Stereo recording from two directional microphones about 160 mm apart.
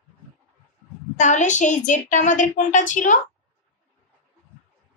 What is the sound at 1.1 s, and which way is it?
A woman's voice, 50° left (ahead or behind).